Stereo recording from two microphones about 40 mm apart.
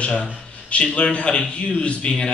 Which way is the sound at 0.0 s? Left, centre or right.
Left.